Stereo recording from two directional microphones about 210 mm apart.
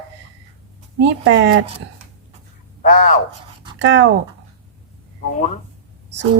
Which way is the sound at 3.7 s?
60° right (ahead or behind).